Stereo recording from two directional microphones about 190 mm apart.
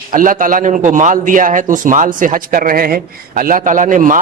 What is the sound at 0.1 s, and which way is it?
A man's voice, 45° right (ahead or behind).